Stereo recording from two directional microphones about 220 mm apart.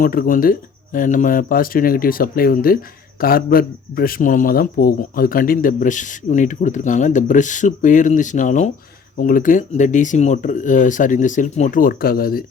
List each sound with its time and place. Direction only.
0.0 s a man's voice: 40° left (ahead or behind)